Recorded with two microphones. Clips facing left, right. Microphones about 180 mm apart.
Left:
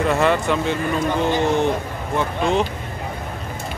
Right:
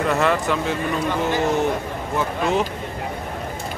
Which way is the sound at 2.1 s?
5° right (ahead or behind).